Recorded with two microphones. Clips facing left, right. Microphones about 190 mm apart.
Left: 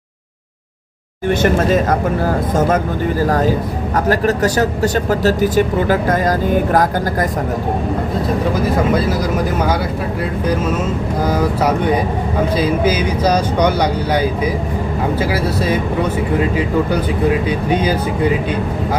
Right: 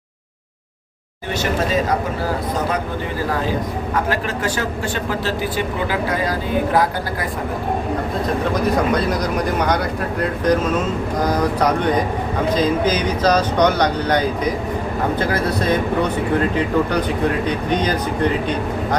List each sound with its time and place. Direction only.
1.3 s speech: 50° left (ahead or behind)
8.5 s speech: 5° left (ahead or behind)
11.3 s speech: 5° left (ahead or behind)